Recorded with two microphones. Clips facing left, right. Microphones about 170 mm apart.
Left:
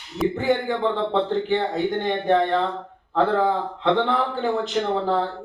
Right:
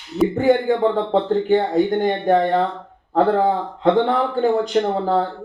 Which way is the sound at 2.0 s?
40° right (ahead or behind).